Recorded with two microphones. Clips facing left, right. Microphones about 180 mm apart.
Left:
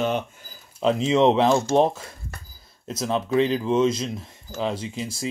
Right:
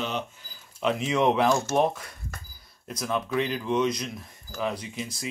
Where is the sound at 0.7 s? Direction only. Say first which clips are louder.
Left 5 dB; 30° left (ahead or behind).